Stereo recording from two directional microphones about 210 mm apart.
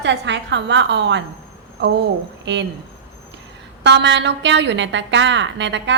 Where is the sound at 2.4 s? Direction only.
55° right (ahead or behind).